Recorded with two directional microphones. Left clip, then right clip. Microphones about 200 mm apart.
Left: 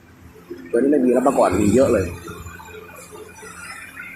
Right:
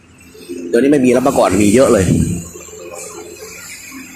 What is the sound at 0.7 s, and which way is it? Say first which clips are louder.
Speech: right 5 dB; 20° right (ahead or behind).